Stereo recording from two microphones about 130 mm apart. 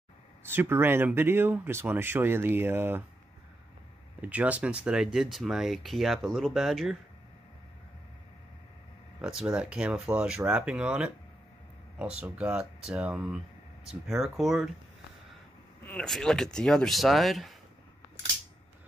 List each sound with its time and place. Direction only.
0.4 s speech: 15° right (ahead or behind)
4.2 s speech: 10° right (ahead or behind)
9.2 s speech: 5° right (ahead or behind)
15.8 s a sound: 15° left (ahead or behind)
16.1 s speech: 5° left (ahead or behind)